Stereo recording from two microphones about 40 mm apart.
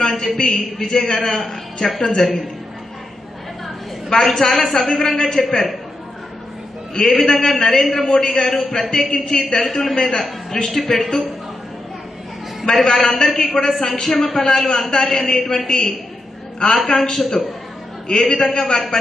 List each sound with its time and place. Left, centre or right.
0.0 s a sound: centre
0.3 s a man's voice: centre
4.1 s a man's voice: centre
7.3 s a man's voice: centre
12.7 s a man's voice: centre